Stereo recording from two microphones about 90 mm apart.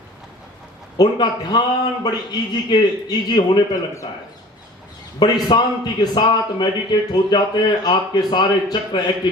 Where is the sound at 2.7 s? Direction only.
55° left (ahead or behind).